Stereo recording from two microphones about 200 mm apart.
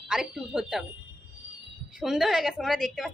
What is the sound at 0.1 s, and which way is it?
Speech, 5° right (ahead or behind).